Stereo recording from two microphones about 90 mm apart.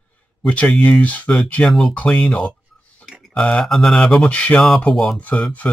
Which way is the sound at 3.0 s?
Centre (ahead or behind).